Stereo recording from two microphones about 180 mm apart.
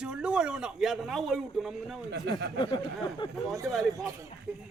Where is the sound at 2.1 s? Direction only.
70° right (ahead or behind).